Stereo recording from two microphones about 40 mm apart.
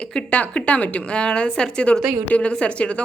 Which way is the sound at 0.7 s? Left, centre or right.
Left.